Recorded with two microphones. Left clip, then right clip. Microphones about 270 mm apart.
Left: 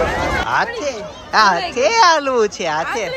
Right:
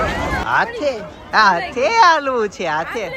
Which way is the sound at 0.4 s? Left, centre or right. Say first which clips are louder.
Right 1 dB; centre.